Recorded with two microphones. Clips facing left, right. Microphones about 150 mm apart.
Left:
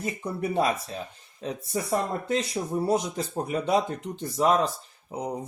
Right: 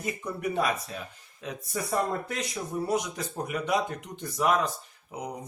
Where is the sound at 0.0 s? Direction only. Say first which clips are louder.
Left 2 dB; 30° left (ahead or behind).